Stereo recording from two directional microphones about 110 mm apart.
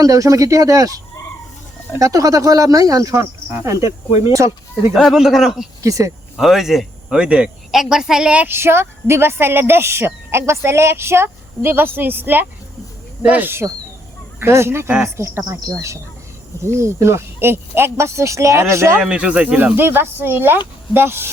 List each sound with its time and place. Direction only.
0.0 s speech: 30° right (ahead or behind)
4.9 s speech: centre (ahead or behind)
5.8 s speech: 30° right (ahead or behind)
6.3 s speech: 5° right (ahead or behind); by 19.0 s 25° right (ahead or behind)
19.0 s speech: 10° right (ahead or behind)